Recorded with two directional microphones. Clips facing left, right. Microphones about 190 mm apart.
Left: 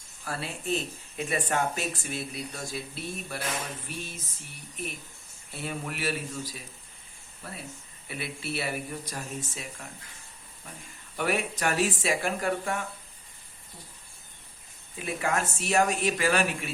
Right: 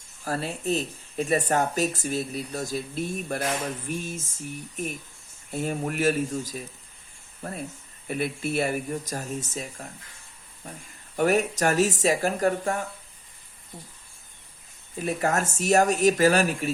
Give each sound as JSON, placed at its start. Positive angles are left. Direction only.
{"t": 0.3, "sound": "speech", "side_deg": -40}
{"t": 14.9, "sound": "speech", "side_deg": -40}